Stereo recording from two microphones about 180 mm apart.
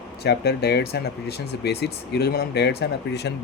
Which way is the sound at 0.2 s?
65° left (ahead or behind).